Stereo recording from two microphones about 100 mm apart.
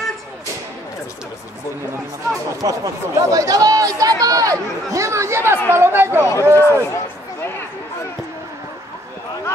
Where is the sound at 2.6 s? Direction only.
35° right (ahead or behind).